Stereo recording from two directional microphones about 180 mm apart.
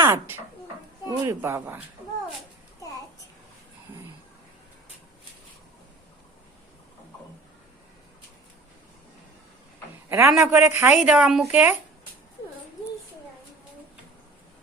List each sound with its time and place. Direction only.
0.0 s speech: 15° right (ahead or behind)
10.1 s a man's voice: 15° right (ahead or behind)